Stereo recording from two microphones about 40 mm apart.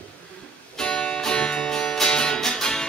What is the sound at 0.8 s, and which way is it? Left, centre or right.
Music, left.